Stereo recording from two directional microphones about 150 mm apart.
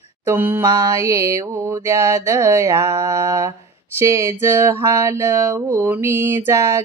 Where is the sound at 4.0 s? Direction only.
20° right (ahead or behind).